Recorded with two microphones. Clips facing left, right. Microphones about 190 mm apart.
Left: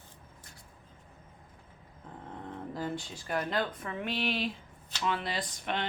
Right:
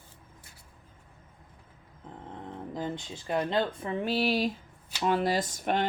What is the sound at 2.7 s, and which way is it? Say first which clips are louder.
Speech: right 2 dB; 20° right (ahead or behind).